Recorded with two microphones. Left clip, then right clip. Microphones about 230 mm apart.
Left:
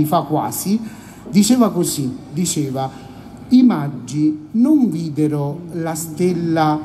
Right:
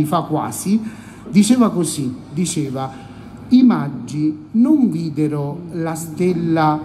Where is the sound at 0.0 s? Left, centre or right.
Left.